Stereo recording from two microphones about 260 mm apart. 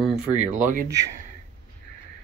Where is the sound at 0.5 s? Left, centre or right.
Right.